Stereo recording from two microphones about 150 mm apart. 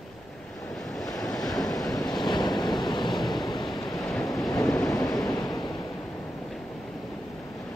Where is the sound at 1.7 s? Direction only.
25° left (ahead or behind).